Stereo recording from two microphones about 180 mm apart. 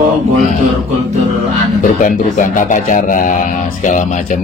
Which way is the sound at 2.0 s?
45° left (ahead or behind).